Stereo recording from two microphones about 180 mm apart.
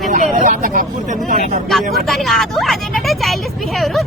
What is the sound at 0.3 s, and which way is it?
Speech, 45° right (ahead or behind).